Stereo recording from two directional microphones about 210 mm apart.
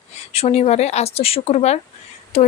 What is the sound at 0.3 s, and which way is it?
A woman's voice, 30° left (ahead or behind).